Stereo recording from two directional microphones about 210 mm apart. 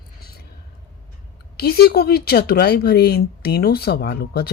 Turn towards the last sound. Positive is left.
turn(degrees=50)  # may be behind; listen again after turning